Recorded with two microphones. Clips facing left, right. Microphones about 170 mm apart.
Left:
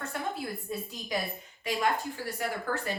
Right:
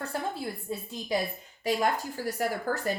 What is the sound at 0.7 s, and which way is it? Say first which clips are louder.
Speech: right 4 dB; 30° right (ahead or behind).